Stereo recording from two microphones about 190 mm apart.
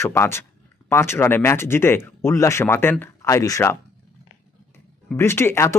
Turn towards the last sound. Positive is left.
turn(degrees=15)  # may be behind; listen again after turning